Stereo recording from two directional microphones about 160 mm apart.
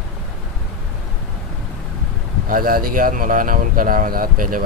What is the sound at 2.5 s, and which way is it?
Speech, 60° right (ahead or behind).